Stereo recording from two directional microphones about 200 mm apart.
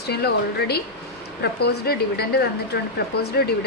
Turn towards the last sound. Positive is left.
turn(degrees=55)  # may be behind; listen again after turning